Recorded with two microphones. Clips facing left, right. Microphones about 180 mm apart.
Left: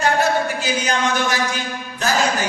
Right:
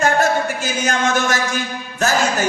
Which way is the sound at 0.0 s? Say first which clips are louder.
Right 1 dB; 45° right (ahead or behind).